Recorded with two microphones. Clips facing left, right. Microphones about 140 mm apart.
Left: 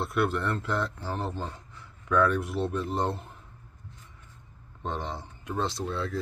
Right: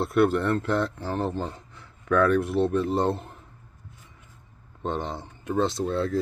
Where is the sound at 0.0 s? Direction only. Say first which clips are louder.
Right 6 dB; 45° right (ahead or behind).